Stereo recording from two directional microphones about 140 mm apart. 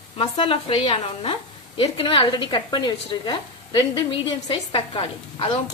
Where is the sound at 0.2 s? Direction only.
40° left (ahead or behind).